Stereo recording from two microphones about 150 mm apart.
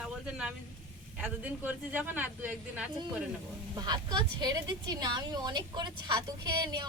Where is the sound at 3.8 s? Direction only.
30° right (ahead or behind).